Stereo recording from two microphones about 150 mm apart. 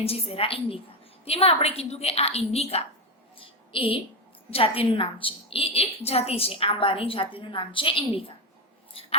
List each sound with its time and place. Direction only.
0.0 s a woman's voice: 40° left (ahead or behind)
3.3 s a sound: 35° left (ahead or behind)
4.5 s a woman's voice: 40° left (ahead or behind)
8.9 s scissors: 40° left (ahead or behind)